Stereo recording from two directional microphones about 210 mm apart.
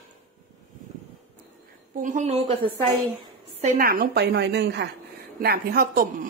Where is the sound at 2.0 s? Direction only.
35° right (ahead or behind).